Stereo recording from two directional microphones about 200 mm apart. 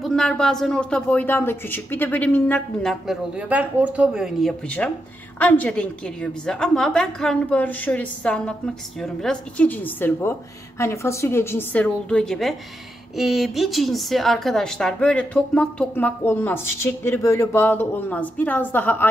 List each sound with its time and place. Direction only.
0.0 s a woman's voice: 5° left (ahead or behind)